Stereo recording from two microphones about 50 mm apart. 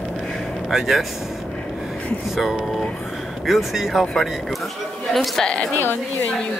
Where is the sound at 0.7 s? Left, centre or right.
Centre.